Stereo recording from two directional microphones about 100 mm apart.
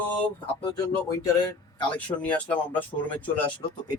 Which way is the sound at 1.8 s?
15° left (ahead or behind).